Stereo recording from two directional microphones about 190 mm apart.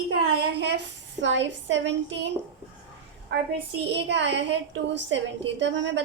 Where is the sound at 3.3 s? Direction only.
65° right (ahead or behind).